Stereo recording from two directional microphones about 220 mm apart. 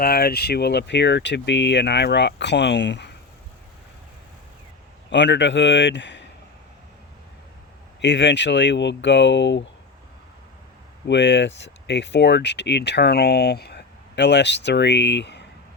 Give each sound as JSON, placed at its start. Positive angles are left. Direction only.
{"t": 0.0, "sound": "speech", "side_deg": 45}
{"t": 5.1, "sound": "speech", "side_deg": 55}
{"t": 8.0, "sound": "speech", "side_deg": 55}
{"t": 11.0, "sound": "speech", "side_deg": 55}